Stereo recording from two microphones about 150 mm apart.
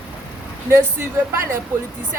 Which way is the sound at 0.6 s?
15° right (ahead or behind).